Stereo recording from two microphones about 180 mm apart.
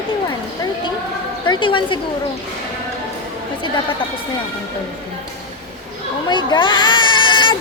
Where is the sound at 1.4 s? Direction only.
25° left (ahead or behind).